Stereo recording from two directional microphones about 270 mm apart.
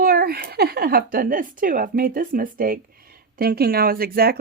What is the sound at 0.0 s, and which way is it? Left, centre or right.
Speech, right.